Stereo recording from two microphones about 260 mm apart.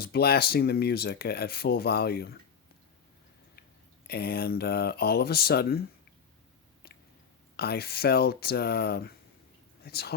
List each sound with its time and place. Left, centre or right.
0.0 s speech: left
4.0 s speech: left
6.8 s chewing: left
7.5 s speech: left